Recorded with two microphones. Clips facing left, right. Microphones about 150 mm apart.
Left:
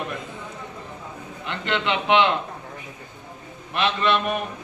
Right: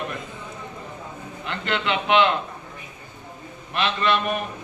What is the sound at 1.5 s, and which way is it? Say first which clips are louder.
Speech: even; 20° left (ahead or behind).